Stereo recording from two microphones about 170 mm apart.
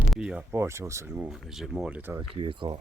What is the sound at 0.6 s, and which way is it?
Speech, 15° right (ahead or behind).